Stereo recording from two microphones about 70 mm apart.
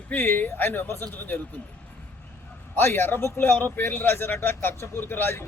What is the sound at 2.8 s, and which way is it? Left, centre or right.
Speech, left.